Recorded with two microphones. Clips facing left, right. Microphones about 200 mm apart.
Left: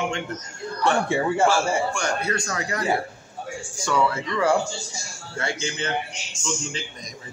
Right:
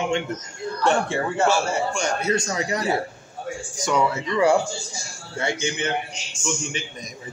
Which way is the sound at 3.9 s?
20° right (ahead or behind).